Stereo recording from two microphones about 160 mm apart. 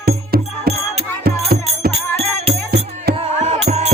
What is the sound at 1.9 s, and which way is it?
Music, 40° right (ahead or behind).